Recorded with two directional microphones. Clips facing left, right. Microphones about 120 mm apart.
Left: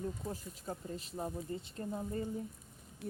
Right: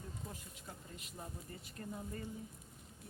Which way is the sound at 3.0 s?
80° left.